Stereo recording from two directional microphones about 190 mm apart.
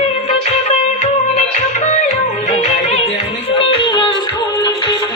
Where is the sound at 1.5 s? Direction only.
40° left (ahead or behind).